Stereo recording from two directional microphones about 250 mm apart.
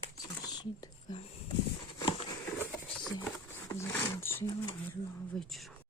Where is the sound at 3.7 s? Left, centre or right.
Centre.